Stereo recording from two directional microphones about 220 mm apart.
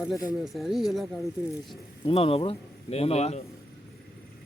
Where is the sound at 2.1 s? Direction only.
25° left (ahead or behind).